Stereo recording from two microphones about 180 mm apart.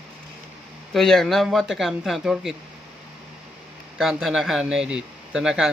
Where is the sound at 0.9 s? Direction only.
Centre (ahead or behind).